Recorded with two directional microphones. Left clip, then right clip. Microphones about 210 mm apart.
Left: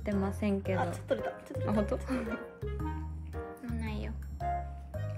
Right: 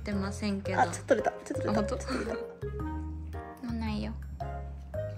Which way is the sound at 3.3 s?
10° right (ahead or behind).